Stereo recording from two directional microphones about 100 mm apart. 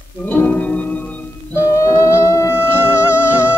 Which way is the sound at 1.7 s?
30° left (ahead or behind).